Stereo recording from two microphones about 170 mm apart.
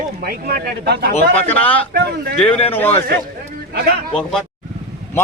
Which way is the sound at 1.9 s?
70° right (ahead or behind).